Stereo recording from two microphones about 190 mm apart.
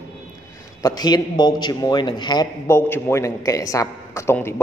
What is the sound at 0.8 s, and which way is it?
A man's voice, 20° left (ahead or behind).